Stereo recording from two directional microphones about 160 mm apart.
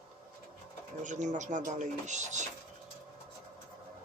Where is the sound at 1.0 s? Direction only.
50° right (ahead or behind).